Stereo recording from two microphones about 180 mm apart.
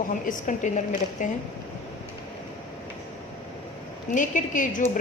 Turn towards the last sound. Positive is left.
turn(degrees=45)  # may be behind; listen again after turning